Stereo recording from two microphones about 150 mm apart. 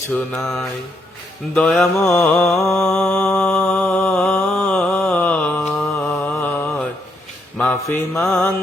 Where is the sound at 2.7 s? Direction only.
5° left (ahead or behind).